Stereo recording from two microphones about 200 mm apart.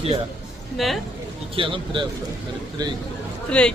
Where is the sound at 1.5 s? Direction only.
25° right (ahead or behind).